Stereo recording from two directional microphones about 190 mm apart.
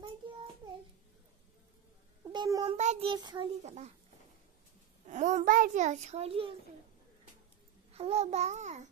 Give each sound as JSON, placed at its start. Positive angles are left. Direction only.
{"t": 2.3, "sound": "a child's voice", "side_deg": -20}
{"t": 3.1, "sound": "a child's voice", "side_deg": -25}
{"t": 3.6, "sound": "a child's voice", "side_deg": -35}
{"t": 5.0, "sound": "a child's voice", "side_deg": -40}
{"t": 7.9, "sound": "a child's voice", "side_deg": -35}